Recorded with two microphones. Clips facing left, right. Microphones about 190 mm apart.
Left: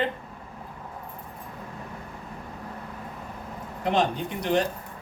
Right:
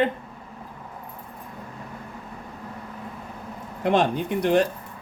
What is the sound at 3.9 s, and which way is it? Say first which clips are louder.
Speech: right 4 dB; 55° right (ahead or behind).